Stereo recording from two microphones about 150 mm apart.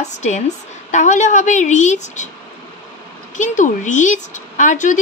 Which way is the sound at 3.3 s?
55° left (ahead or behind).